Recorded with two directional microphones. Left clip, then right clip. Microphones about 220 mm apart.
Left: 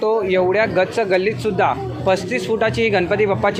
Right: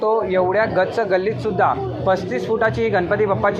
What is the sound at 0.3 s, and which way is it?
Speech, 30° left (ahead or behind).